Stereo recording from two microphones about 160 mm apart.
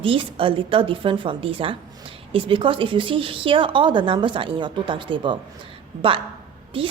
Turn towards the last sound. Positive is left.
turn(degrees=-35)  # may be behind; listen again after turning